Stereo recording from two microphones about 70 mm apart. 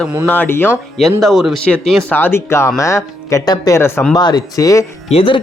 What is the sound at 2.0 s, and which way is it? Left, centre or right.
Speech, left.